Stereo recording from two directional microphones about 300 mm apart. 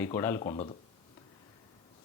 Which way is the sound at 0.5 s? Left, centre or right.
Left.